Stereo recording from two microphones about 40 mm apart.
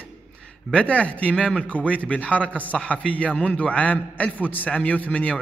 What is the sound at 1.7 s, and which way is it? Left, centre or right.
Speech, left.